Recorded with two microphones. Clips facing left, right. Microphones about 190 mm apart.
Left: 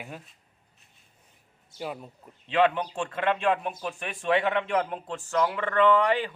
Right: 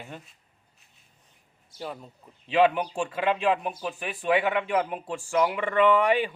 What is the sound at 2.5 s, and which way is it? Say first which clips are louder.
Speech: right 2 dB; 10° right (ahead or behind).